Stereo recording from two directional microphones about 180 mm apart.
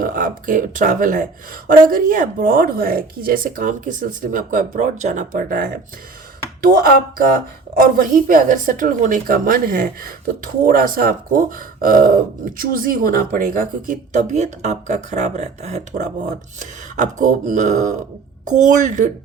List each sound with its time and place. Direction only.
0.0 s speech: 50° right (ahead or behind)